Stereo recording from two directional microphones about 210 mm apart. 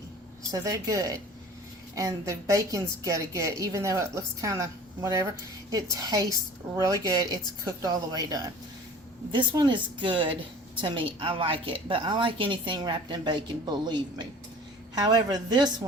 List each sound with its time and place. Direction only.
0.5 s a woman's voice: 15° right (ahead or behind)